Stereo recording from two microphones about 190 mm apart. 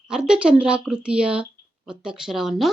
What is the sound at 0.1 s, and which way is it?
Speech, 5° right (ahead or behind).